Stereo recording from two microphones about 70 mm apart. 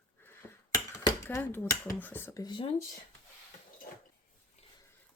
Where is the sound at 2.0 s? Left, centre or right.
Left.